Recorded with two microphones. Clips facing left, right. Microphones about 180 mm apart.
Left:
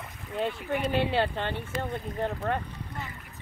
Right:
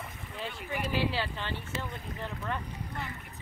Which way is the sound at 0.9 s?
55° left (ahead or behind).